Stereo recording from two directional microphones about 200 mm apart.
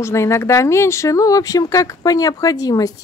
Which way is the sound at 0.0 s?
15° left (ahead or behind).